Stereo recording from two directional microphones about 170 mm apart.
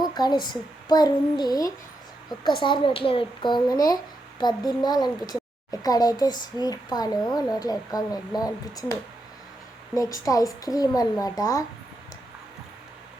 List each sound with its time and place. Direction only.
0.0 s speech: 25° left (ahead or behind)
9.9 s speech: 20° left (ahead or behind)